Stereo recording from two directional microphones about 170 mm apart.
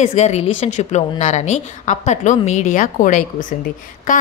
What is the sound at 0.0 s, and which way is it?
Speech, 40° left (ahead or behind).